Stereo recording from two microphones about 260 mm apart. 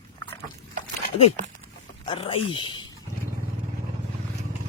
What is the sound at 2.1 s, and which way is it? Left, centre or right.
Speech, centre.